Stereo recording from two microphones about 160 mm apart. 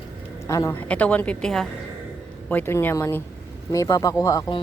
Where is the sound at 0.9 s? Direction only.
10° left (ahead or behind).